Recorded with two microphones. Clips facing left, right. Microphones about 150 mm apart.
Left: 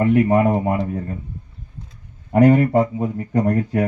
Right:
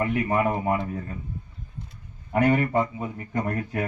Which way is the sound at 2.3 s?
40° left (ahead or behind).